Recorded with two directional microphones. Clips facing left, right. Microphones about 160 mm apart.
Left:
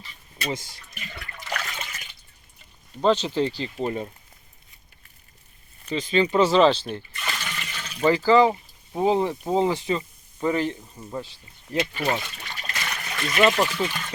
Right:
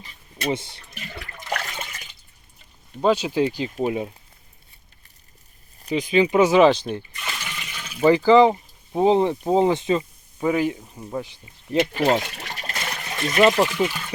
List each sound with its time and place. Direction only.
0.5 s toilet flush: 25° right (ahead or behind)
1.4 s toilet flush: 15° right (ahead or behind)
3.0 s speech: 10° right (ahead or behind)
5.9 s speech: 10° right (ahead or behind)
10.4 s speech: 10° right (ahead or behind)
11.8 s speech: 55° right (ahead or behind); by 12.5 s 75° right (ahead or behind)
12.5 s trickle: 30° right (ahead or behind); by 14.1 s 10° right (ahead or behind)